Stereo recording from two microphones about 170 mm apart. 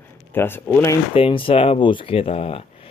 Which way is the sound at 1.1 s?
30° left (ahead or behind).